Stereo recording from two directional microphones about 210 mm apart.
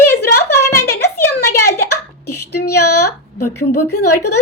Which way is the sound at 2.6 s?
90° left.